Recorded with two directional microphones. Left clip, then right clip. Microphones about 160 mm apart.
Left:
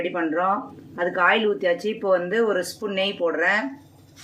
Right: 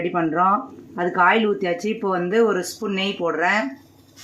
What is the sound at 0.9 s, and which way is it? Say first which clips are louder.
Speech: right 2 dB; 60° right (ahead or behind).